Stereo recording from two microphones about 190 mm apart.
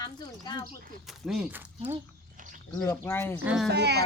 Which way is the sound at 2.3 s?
45° right (ahead or behind).